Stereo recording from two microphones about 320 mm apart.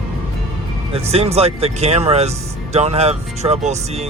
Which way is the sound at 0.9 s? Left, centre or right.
Centre.